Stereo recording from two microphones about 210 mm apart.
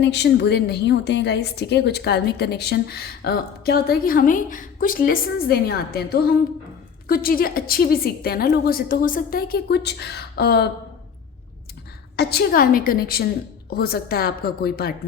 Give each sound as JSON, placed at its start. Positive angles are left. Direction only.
{"t": 0.0, "sound": "a woman's voice", "side_deg": 55}
{"t": 12.1, "sound": "a woman's voice", "side_deg": 50}